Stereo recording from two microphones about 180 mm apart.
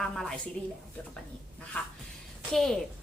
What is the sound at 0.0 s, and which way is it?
Speech, centre (ahead or behind).